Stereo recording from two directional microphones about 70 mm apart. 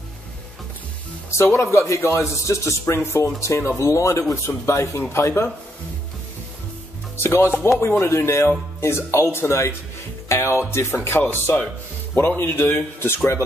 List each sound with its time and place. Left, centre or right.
1.3 s speech: left
7.2 s speech: left